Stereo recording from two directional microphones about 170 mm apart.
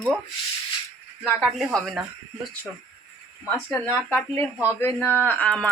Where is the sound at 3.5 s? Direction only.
10° left (ahead or behind).